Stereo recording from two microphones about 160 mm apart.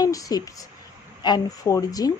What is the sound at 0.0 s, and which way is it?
Speech, 25° left (ahead or behind).